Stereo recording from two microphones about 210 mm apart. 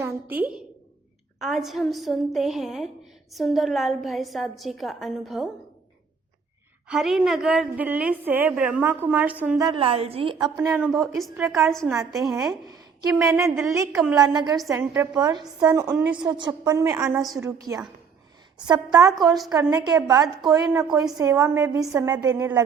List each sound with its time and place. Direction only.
0.0 s a woman's voice: 5° right (ahead or behind)
6.8 s a woman's voice: centre (ahead or behind)
9.6 s a woman's voice: 20° right (ahead or behind)
10.4 s a woman's voice: 15° right (ahead or behind)
10.8 s a woman's voice: 5° right (ahead or behind)
12.6 s a woman's voice: 15° right (ahead or behind)
14.2 s a woman's voice: 20° right (ahead or behind)